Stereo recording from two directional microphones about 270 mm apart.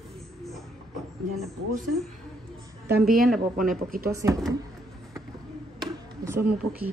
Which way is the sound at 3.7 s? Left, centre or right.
Right.